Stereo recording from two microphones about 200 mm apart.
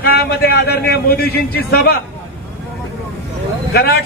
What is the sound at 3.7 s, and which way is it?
Speech, 55° left (ahead or behind).